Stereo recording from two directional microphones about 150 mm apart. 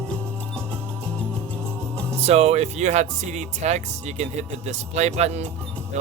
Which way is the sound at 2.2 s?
45° right (ahead or behind).